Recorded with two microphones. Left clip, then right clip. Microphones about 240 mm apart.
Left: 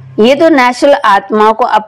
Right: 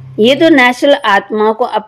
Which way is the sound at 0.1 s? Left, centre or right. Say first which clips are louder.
Left 2 dB; left.